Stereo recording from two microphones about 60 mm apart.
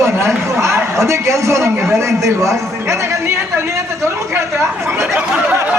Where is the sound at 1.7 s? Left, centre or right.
Right.